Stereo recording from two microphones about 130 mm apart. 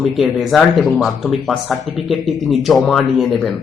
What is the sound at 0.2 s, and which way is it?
Speech, centre (ahead or behind).